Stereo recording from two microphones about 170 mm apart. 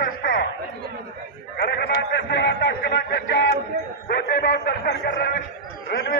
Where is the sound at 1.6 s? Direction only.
70° left (ahead or behind).